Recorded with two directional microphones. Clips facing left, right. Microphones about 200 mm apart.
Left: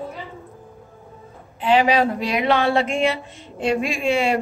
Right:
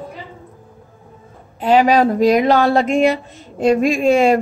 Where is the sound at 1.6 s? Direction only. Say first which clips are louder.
Right 4 dB; 40° right (ahead or behind).